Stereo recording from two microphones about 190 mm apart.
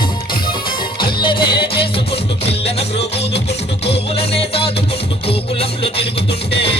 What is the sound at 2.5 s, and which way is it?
Music, 30° left (ahead or behind).